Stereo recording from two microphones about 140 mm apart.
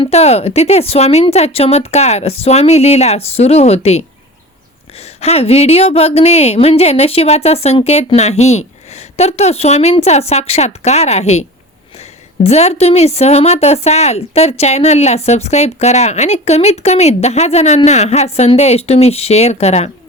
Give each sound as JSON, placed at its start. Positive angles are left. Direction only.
{"t": 0.0, "sound": "a woman's voice", "side_deg": 50}